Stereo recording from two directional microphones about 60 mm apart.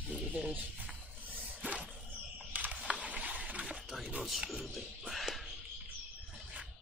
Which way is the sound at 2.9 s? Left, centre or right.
Right.